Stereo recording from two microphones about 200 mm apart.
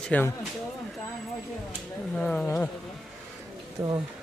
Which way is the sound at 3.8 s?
15° right (ahead or behind).